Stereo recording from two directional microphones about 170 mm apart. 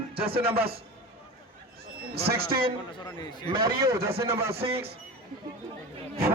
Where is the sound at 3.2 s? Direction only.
25° left (ahead or behind).